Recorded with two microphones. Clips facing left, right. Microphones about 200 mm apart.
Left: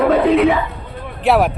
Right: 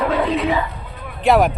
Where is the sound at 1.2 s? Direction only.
Centre (ahead or behind).